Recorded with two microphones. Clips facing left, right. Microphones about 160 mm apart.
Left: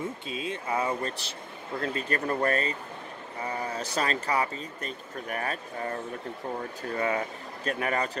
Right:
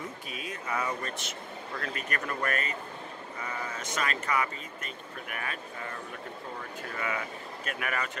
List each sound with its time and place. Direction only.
0.3 s speech: 25° left (ahead or behind)
7.0 s speech: 35° left (ahead or behind)